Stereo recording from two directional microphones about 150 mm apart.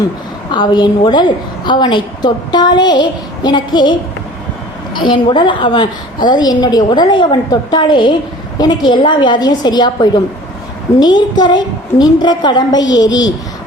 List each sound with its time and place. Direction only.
0.5 s a woman's voice: 30° left (ahead or behind)
4.9 s a woman's voice: 30° left (ahead or behind)